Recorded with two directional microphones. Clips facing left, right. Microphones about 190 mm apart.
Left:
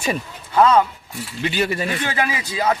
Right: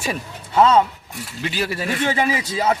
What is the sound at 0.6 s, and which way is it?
Speech, 25° right (ahead or behind).